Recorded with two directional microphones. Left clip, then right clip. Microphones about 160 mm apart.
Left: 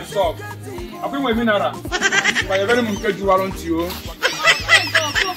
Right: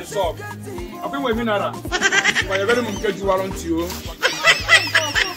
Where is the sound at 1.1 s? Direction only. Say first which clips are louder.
Left 2 dB; 40° right (ahead or behind).